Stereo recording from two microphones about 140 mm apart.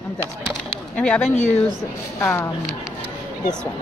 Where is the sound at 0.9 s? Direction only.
10° left (ahead or behind).